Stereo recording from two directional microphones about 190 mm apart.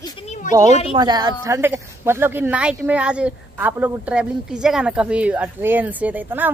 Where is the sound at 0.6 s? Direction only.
35° left (ahead or behind).